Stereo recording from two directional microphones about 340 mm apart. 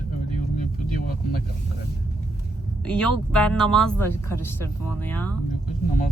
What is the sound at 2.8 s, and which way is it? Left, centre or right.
Speech, centre.